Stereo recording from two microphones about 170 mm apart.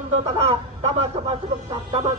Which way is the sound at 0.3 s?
35° right (ahead or behind).